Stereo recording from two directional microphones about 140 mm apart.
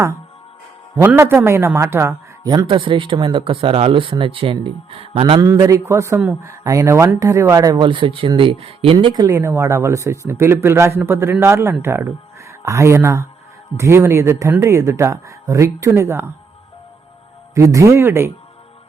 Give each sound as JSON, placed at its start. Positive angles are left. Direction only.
{"t": 0.9, "sound": "speech", "side_deg": -15}
{"t": 2.6, "sound": "speech", "side_deg": -35}
{"t": 5.4, "sound": "speech", "side_deg": -20}
{"t": 7.9, "sound": "speech", "side_deg": -40}
{"t": 9.2, "sound": "speech", "side_deg": -20}
{"t": 17.5, "sound": "speech", "side_deg": -20}